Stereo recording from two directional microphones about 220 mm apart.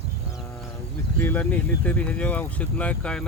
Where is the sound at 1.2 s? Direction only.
10° left (ahead or behind).